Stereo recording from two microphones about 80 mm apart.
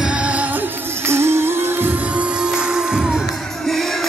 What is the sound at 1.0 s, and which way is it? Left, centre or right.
Music, right.